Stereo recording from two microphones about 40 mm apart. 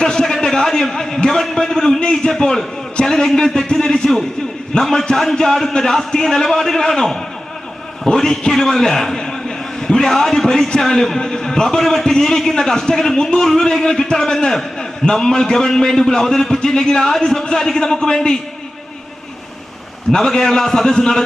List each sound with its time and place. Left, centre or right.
0.0 s a man's voice: centre
0.3 s a sound: centre
2.4 s a man's voice: centre
20.1 s a man's voice: centre